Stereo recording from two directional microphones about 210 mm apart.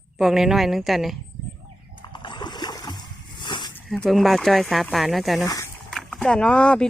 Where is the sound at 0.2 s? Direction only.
Centre (ahead or behind).